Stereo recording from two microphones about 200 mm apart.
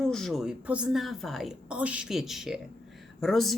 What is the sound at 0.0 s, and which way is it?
Speech, centre (ahead or behind).